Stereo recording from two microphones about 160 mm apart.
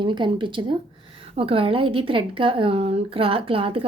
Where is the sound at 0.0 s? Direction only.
30° right (ahead or behind).